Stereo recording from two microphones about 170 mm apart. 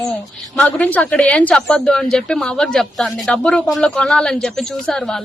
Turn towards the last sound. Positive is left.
turn(degrees=5)  # may be behind; listen again after turning